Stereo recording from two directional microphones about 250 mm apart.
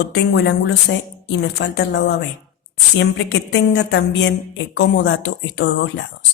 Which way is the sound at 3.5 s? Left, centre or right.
Left.